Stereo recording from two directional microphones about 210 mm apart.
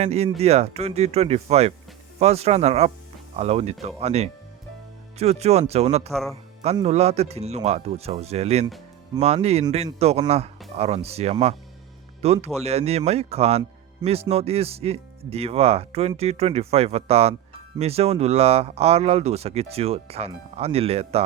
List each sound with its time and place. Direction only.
0.0 s a man's voice: 30° right (ahead or behind)